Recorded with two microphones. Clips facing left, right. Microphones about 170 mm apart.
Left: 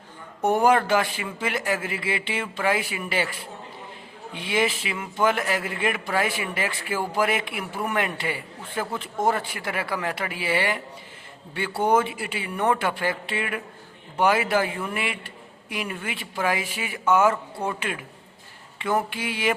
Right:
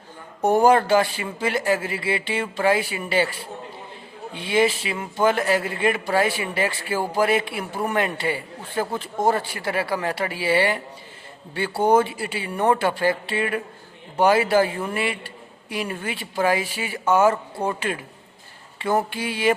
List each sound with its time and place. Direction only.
0.4 s a man's voice: 35° right (ahead or behind)